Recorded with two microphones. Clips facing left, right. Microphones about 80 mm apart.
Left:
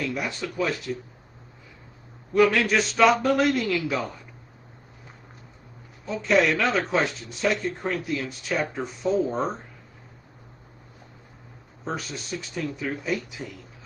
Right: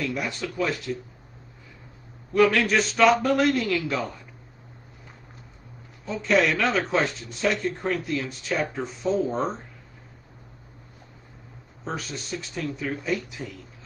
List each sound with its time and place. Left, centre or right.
0.1 s speech: centre
2.3 s speech: centre
6.0 s speech: centre
11.8 s speech: centre